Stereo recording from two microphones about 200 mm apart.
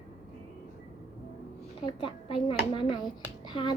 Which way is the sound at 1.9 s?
25° left (ahead or behind).